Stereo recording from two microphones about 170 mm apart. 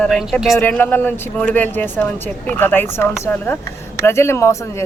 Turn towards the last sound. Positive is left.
turn(degrees=15)  # may be behind; listen again after turning